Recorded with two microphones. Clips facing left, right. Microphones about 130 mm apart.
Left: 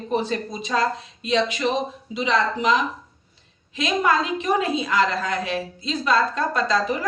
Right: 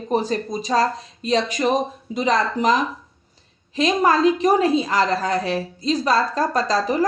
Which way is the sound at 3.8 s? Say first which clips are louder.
Right 4 dB; 35° right (ahead or behind).